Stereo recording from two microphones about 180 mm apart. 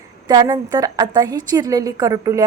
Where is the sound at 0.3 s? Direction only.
20° right (ahead or behind).